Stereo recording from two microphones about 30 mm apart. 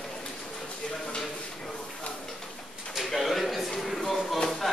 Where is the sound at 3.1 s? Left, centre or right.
Centre.